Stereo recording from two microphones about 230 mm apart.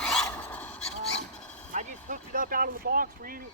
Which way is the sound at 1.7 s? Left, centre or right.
Right.